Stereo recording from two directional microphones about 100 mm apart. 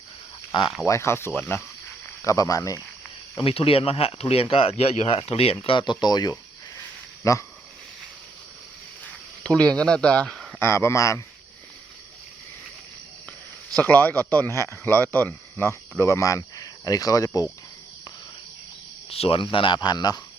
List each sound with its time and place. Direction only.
0.9 s speech: 25° left (ahead or behind)
2.2 s speech: 35° left (ahead or behind)
3.4 s speech: 70° left (ahead or behind)
4.8 s speech: 90° left
5.6 s speech: 50° left (ahead or behind)
7.2 s speech: 30° left (ahead or behind)
9.0 s a sound: 10° left (ahead or behind)
10.6 s speech: 25° left (ahead or behind)
13.8 s speech: 20° left (ahead or behind); by 17.4 s 35° left (ahead or behind)
19.1 s speech: 85° left
19.4 s speech: 55° left (ahead or behind)
19.8 s speech: 45° left (ahead or behind)